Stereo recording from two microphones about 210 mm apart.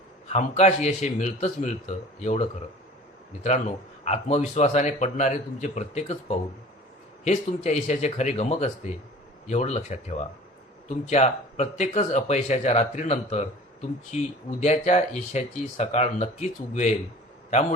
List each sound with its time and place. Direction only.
0.3 s speech: 30° left (ahead or behind)
4.0 s speech: 30° left (ahead or behind)